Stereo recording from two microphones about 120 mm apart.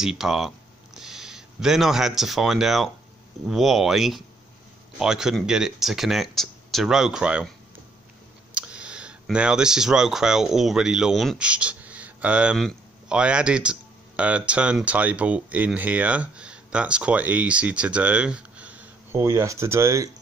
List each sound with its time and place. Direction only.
0.0 s speech: 5° right (ahead or behind)
8.5 s speech: 10° right (ahead or behind)
19.1 s speech: 25° right (ahead or behind)